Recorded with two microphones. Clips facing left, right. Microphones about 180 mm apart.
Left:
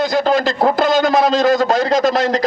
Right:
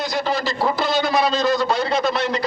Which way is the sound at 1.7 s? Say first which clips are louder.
Left 6 dB; 90° left.